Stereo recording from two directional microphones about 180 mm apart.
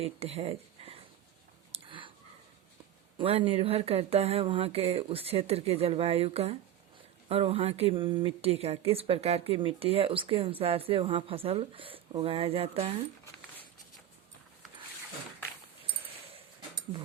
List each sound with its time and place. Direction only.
0.0 s speech: 35° right (ahead or behind)
1.7 s a sound: 30° right (ahead or behind)
3.2 s speech: 30° right (ahead or behind)